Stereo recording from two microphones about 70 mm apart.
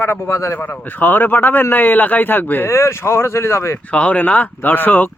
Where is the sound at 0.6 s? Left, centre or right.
Left.